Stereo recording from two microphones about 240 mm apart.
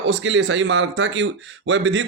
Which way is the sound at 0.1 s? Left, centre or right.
Right.